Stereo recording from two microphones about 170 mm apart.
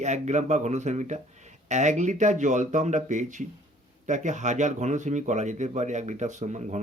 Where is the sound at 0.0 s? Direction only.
45° right (ahead or behind).